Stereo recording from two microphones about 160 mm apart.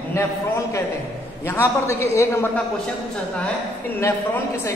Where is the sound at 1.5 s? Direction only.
15° left (ahead or behind).